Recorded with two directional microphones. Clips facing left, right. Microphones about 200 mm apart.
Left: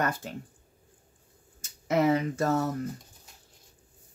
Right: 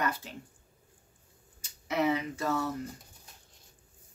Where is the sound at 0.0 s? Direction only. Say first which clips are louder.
Left 3 dB; 50° left (ahead or behind).